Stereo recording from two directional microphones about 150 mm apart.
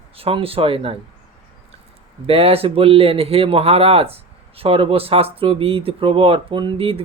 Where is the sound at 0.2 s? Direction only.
40° right (ahead or behind).